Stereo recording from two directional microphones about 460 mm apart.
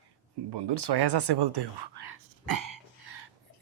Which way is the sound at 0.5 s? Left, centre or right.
Right.